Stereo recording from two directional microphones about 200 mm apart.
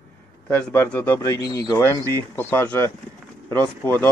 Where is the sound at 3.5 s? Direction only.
20° right (ahead or behind).